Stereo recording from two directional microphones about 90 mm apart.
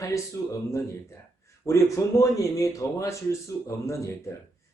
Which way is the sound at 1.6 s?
35° left (ahead or behind).